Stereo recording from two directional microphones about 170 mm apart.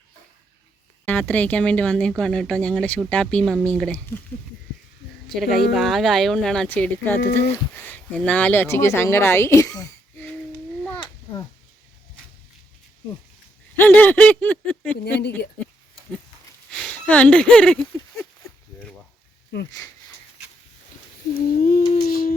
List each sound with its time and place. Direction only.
1.3 s speech: 10° left (ahead or behind)
5.3 s a woman's voice: centre (ahead or behind); by 10.2 s 20° left (ahead or behind)
13.7 s speech: 10° left (ahead or behind)
14.9 s speech: 70° left (ahead or behind)
16.7 s speech: 5° left (ahead or behind)
21.3 s a sound: 55° left (ahead or behind)